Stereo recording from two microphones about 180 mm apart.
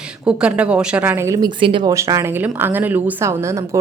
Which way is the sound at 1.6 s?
30° right (ahead or behind).